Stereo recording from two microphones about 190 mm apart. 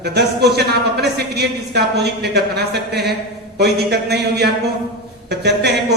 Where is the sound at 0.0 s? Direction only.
60° right (ahead or behind).